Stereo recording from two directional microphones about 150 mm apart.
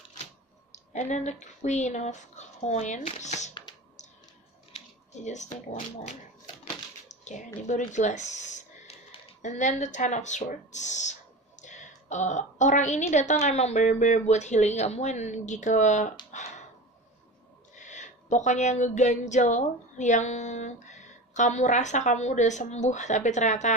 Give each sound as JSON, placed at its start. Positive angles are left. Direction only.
{"t": 0.9, "sound": "speech", "side_deg": 50}
{"t": 4.7, "sound": "speech", "side_deg": 50}
{"t": 16.3, "sound": "a sound", "side_deg": 50}
{"t": 17.7, "sound": "speech", "side_deg": 55}